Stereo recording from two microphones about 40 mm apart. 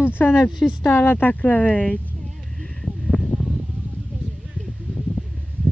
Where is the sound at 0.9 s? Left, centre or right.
Left.